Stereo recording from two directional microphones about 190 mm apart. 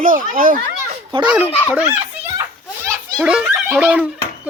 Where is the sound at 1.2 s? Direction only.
10° right (ahead or behind).